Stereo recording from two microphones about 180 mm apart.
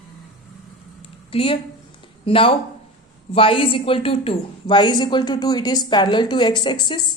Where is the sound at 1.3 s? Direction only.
30° left (ahead or behind).